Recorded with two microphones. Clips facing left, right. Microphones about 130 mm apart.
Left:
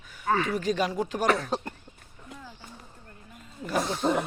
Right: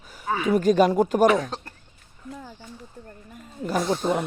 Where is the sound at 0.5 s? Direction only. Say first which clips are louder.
Right 9 dB; 45° right (ahead or behind).